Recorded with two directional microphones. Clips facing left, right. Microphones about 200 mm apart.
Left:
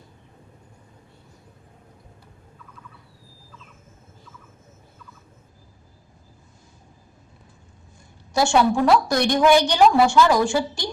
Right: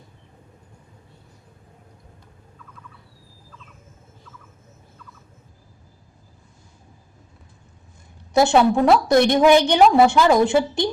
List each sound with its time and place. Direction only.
8.3 s a woman's voice: 20° right (ahead or behind)